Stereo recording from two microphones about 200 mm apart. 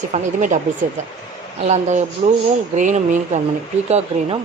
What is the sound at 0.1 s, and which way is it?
Speech, 35° right (ahead or behind).